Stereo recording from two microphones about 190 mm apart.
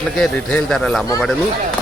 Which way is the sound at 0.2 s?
Centre (ahead or behind).